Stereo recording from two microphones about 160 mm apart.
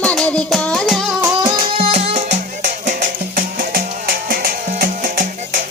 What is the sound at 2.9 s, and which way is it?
Music, 60° right (ahead or behind).